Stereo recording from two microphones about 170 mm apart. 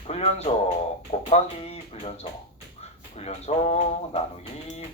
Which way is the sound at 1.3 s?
35° left (ahead or behind).